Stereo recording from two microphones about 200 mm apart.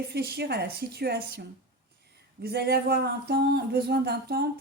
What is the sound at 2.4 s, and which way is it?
Speech, 55° right (ahead or behind).